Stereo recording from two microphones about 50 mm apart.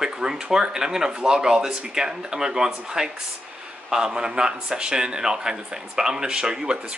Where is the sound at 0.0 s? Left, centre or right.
Centre.